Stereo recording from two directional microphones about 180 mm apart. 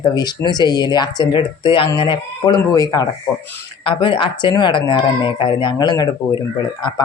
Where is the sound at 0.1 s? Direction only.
20° left (ahead or behind).